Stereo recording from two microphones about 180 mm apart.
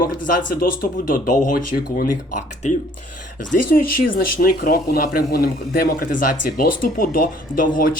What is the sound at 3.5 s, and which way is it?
Speech, 50° left (ahead or behind).